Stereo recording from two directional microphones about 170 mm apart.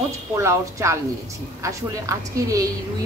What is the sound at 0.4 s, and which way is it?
A woman's voice, 15° right (ahead or behind).